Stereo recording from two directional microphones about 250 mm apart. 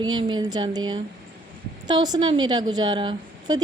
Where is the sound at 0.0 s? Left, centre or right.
Centre.